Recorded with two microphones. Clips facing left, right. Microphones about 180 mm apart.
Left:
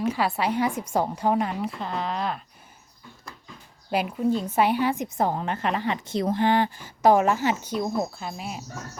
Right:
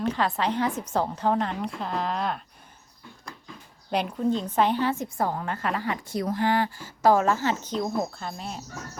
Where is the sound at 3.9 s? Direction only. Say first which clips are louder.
Left 1 dB; 5° left (ahead or behind).